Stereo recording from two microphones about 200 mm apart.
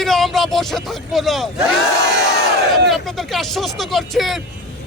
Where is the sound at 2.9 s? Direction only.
Centre (ahead or behind).